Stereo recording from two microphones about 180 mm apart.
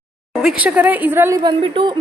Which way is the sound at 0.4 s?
5° right (ahead or behind).